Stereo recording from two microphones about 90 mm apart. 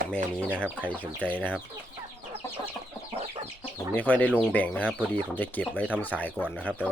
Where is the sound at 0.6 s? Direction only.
15° left (ahead or behind).